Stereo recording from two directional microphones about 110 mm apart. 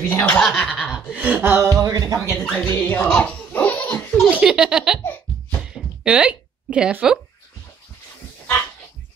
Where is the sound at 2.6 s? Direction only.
20° left (ahead or behind).